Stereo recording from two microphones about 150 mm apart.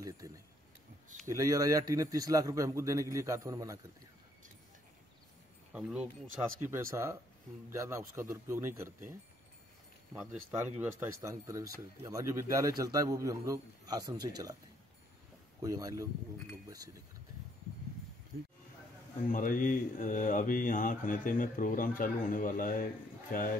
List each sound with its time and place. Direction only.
1.3 s speech: 20° right (ahead or behind)
5.7 s speech: 5° right (ahead or behind)
6.7 s speech: 15° right (ahead or behind)
10.5 s speech: 15° right (ahead or behind)
15.6 s speech: 25° right (ahead or behind)
18.3 s speech: 90° right
19.3 s speech: 65° left (ahead or behind)